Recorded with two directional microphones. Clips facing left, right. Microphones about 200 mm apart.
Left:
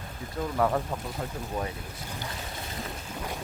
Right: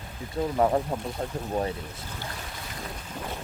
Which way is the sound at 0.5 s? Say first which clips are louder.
Right 3 dB; 25° right (ahead or behind).